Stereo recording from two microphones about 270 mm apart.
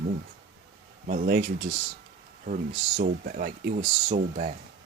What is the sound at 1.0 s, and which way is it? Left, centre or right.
Speech, right.